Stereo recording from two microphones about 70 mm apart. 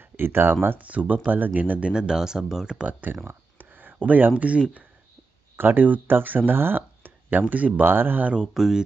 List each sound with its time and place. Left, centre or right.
0.0 s speech: right
8.4 s speech: centre